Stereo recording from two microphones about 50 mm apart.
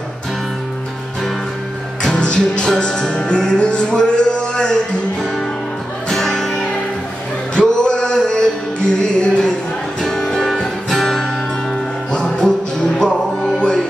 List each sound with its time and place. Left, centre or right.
2.1 s music: centre
6.0 s music: centre
10.0 s music: centre